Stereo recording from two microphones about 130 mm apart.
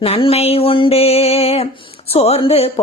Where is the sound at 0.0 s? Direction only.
45° left (ahead or behind).